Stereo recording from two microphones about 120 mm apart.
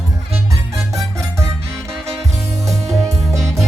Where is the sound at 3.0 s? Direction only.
25° right (ahead or behind).